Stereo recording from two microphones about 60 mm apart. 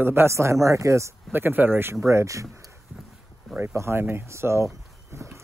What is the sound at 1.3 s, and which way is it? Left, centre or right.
Speech, right.